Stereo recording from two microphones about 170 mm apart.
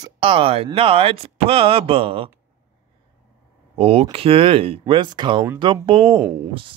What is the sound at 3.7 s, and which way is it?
Speech, 35° right (ahead or behind).